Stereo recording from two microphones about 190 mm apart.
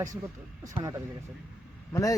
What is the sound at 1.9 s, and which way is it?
Speech, 15° left (ahead or behind).